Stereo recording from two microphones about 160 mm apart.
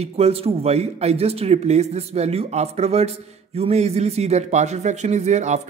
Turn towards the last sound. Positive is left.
turn(degrees=-45)  # may be behind; listen again after turning